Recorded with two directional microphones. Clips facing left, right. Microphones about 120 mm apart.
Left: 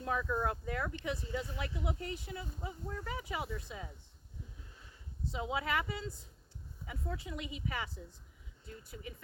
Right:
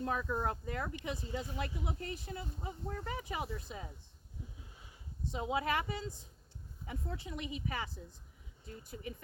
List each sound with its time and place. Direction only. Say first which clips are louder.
0.0 s speech: left 1 dB; 30° right (ahead or behind)
0.9 s a woman's voice: left 2 dB; 15° right (ahead or behind)
2.0 s speech: left 1 dB; 35° right (ahead or behind)
5.5 s speech: right 1 dB; 30° right (ahead or behind)
8.9 s speech: right 4 dB; 35° right (ahead or behind)